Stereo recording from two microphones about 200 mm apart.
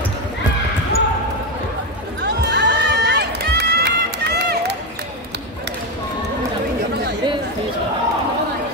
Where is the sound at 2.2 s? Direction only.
55° right (ahead or behind).